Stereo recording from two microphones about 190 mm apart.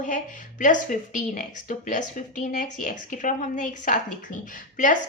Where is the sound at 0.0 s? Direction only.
45° left (ahead or behind).